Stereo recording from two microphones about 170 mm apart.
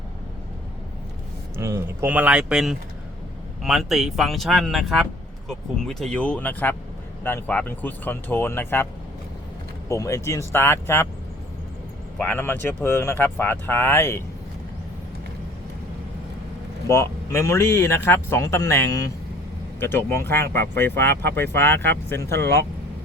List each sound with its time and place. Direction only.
1.5 s speech: 15° right (ahead or behind); by 8.9 s 15° left (ahead or behind)
9.9 s speech: 15° left (ahead or behind)
12.1 s speech: 10° left (ahead or behind)
16.9 s speech: 15° left (ahead or behind)
22.3 s speech: 75° right (ahead or behind)